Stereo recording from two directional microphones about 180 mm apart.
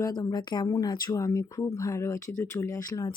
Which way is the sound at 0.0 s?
20° left (ahead or behind).